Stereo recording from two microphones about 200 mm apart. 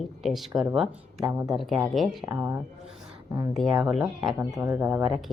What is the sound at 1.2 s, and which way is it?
Speech, 20° right (ahead or behind).